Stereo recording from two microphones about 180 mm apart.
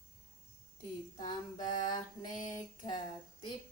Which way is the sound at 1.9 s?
45° left (ahead or behind).